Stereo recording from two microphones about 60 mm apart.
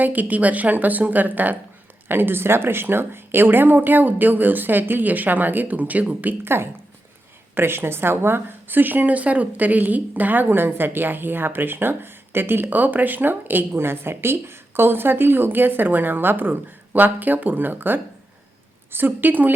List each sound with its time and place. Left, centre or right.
0.0 s a woman's voice: right
6.4 s a woman's voice: right